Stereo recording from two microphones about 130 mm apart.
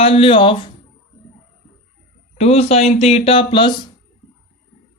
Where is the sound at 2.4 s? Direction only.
55° left (ahead or behind); by 3.8 s 40° left (ahead or behind).